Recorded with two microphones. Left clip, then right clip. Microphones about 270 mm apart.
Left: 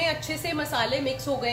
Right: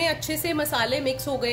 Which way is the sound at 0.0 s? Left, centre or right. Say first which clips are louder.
Right 2 dB; right.